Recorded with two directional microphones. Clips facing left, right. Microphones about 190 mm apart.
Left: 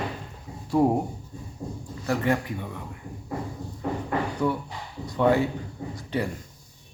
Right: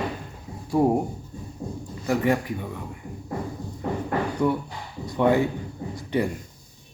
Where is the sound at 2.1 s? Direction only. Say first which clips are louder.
Right 2 dB; 15° right (ahead or behind).